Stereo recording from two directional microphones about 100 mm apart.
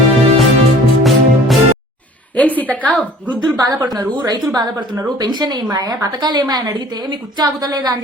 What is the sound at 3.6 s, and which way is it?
A woman's voice, 40° right (ahead or behind).